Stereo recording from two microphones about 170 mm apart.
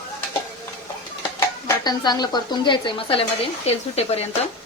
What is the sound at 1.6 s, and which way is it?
Speech, 25° left (ahead or behind).